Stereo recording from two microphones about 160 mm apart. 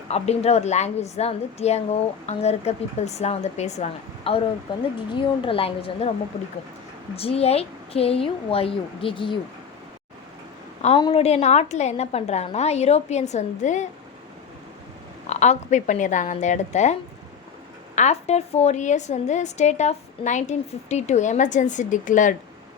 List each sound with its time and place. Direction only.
0.1 s a woman's voice: 40° left (ahead or behind)
10.8 s a woman's voice: 35° left (ahead or behind)
15.3 s a woman's voice: 45° left (ahead or behind)